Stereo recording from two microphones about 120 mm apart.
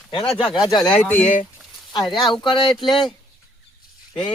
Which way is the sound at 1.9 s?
35° left (ahead or behind).